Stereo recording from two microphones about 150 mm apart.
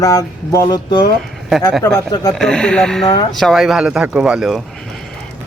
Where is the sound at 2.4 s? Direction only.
5° left (ahead or behind).